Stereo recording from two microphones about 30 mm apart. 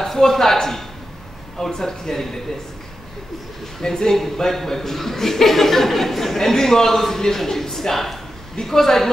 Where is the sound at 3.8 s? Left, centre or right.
Centre.